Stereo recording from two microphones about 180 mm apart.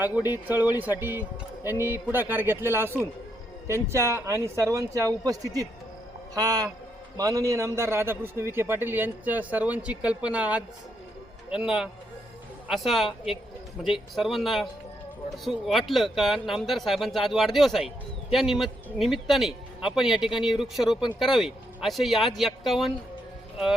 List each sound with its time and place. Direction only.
0.0 s a man's voice: 10° right (ahead or behind)
14.2 s speech: centre (ahead or behind)